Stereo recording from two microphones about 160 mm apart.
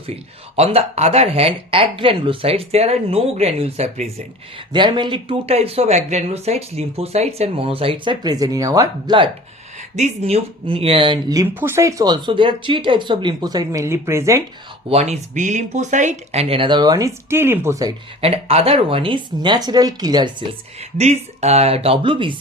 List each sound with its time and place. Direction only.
0.5 s speech: 40° right (ahead or behind)
4.7 s speech: 30° right (ahead or behind)
9.9 s speech: 45° right (ahead or behind); by 11.4 s 25° right (ahead or behind)
11.4 s speech: 15° right (ahead or behind)
14.8 s speech: 40° right (ahead or behind); by 17.9 s 20° right (ahead or behind)
18.2 s speech: 40° right (ahead or behind)
21.0 s speech: 45° right (ahead or behind)